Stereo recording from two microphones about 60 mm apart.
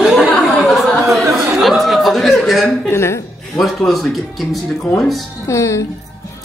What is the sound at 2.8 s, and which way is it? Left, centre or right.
Speech, left.